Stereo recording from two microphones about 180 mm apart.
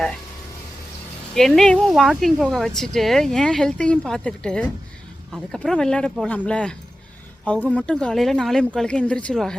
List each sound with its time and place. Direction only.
1.4 s speech: centre (ahead or behind)